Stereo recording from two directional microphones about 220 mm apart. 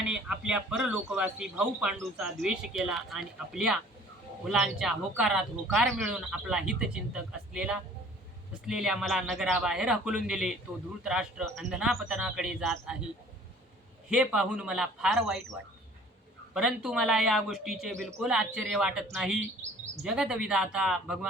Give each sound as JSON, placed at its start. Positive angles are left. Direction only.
{"t": 0.0, "sound": "a man's voice", "side_deg": -5}
{"t": 14.1, "sound": "a man's voice", "side_deg": -5}
{"t": 16.6, "sound": "a man's voice", "side_deg": -5}